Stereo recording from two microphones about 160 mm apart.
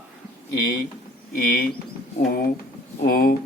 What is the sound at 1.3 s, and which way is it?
Speech, 60° left (ahead or behind).